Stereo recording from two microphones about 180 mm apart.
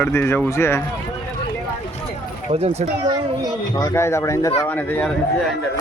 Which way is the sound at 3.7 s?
15° left (ahead or behind).